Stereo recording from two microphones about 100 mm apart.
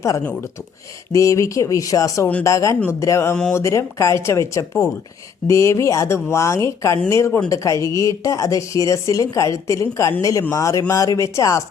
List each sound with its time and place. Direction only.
1.1 s speech: 30° left (ahead or behind)